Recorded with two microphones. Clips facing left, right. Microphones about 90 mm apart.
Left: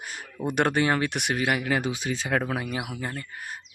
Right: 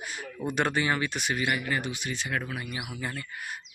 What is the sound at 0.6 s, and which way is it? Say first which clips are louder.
Speech: left 4 dB; 60° left (ahead or behind).